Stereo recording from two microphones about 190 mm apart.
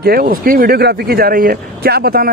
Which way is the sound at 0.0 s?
50° right (ahead or behind).